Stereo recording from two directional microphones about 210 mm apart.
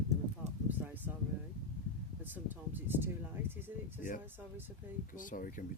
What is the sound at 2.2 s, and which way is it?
Speech, 10° right (ahead or behind).